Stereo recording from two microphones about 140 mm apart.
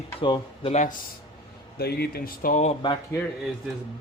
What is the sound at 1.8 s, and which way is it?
Speech, 90° left.